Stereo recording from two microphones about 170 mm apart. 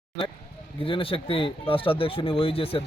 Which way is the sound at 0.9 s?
30° left (ahead or behind).